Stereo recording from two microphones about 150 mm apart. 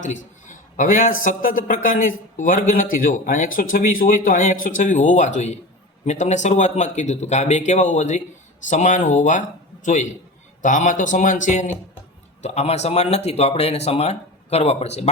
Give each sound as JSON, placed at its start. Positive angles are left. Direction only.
{"t": 0.0, "sound": "a man's voice", "side_deg": 55}